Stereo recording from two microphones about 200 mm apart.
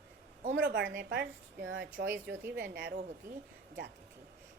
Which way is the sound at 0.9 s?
55° right (ahead or behind).